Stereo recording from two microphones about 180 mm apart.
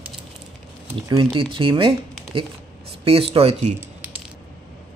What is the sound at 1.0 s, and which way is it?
Speech, 25° right (ahead or behind).